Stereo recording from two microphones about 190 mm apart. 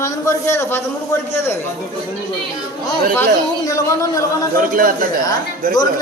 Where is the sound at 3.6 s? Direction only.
15° left (ahead or behind).